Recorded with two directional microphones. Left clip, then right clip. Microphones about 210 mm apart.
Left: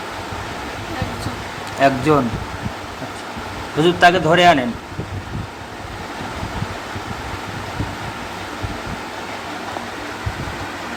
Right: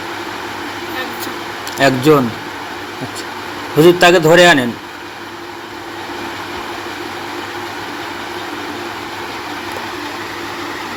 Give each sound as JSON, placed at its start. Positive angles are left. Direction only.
{"t": 1.8, "sound": "speech", "side_deg": -15}
{"t": 3.8, "sound": "a man's voice", "side_deg": -20}